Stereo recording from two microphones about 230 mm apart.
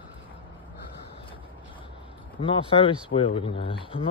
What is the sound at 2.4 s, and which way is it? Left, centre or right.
Speech, left.